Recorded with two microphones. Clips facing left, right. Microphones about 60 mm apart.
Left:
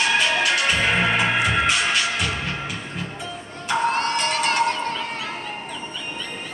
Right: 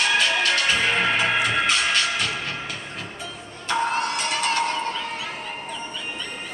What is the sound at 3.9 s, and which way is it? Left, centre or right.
Music, left.